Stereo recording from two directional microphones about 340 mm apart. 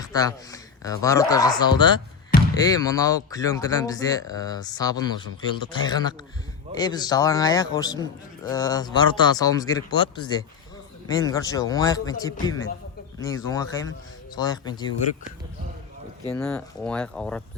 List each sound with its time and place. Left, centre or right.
0.0 s speech: centre
16.3 s speech: centre